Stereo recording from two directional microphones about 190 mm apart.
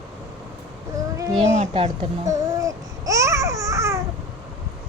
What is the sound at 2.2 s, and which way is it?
Babbling, 15° right (ahead or behind).